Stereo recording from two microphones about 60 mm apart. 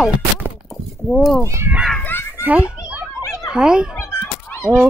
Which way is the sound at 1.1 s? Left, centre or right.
Centre.